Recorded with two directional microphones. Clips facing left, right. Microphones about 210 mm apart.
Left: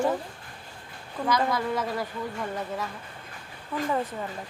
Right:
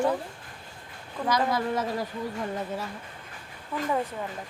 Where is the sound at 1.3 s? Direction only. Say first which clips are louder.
Even; 20° right (ahead or behind).